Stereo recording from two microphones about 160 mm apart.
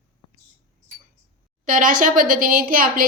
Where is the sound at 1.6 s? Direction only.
55° right (ahead or behind).